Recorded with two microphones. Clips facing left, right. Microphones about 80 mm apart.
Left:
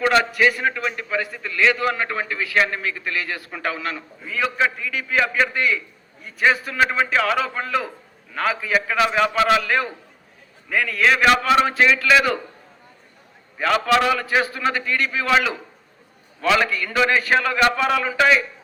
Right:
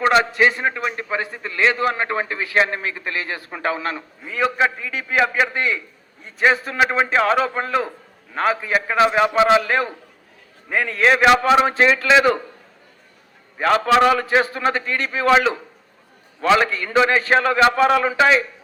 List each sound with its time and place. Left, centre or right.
0.0 s a man's voice: right
6.7 s a man's voice: centre
11.6 s a man's voice: right
13.6 s a man's voice: right